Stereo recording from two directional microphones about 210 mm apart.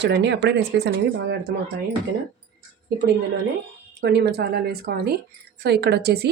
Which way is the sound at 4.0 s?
55° right (ahead or behind).